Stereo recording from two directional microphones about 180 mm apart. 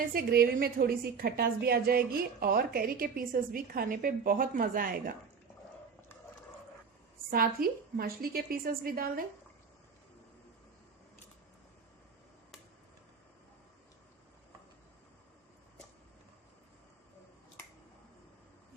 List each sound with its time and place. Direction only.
0.1 s a woman's voice: 55° right (ahead or behind)
7.3 s a woman's voice: 55° right (ahead or behind)